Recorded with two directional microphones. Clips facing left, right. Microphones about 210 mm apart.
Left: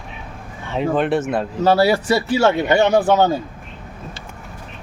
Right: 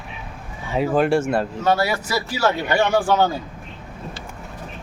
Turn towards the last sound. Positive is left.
turn(degrees=20)  # may be behind; listen again after turning